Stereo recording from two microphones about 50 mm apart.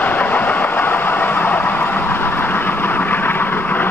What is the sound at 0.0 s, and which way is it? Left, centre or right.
Train, left.